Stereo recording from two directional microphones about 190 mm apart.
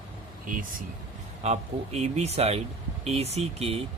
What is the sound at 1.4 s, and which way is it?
Speech, 35° right (ahead or behind).